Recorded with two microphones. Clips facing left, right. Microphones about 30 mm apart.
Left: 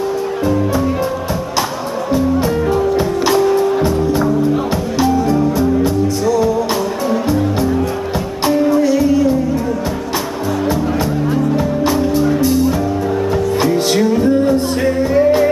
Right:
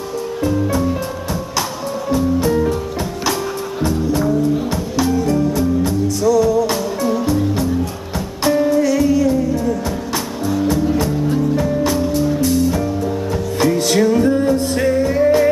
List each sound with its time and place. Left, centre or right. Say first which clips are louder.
2.0 s music: left 1 dB; centre
8.8 s music: left 2 dB; centre
11.0 s music: left 1 dB; centre
13.9 s music: even; centre